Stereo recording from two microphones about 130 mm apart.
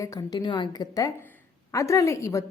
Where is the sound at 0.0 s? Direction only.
25° left (ahead or behind).